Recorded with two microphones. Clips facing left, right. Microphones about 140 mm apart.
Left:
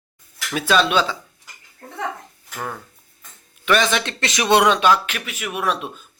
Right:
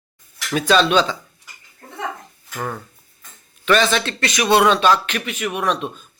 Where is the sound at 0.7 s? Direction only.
10° left (ahead or behind).